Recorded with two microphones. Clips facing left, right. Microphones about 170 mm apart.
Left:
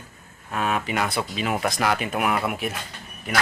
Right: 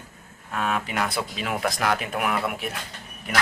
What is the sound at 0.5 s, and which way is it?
Speech, 5° left (ahead or behind).